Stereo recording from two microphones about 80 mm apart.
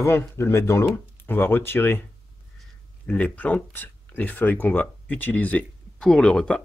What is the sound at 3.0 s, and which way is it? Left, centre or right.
Speech, centre.